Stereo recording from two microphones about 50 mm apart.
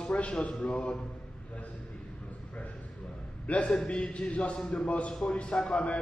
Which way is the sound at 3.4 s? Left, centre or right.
Left.